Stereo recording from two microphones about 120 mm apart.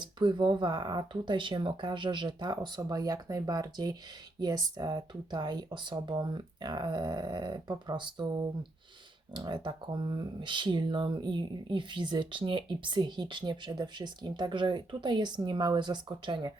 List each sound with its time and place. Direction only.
0.0 s speech: 40° right (ahead or behind)